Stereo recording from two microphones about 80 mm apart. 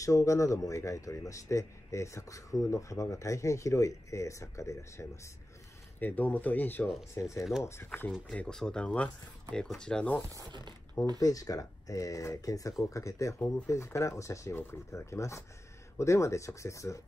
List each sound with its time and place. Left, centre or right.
0.0 s speech: left
5.9 s speech: left
7.2 s speech: left
8.3 s speech: centre
11.1 s speech: left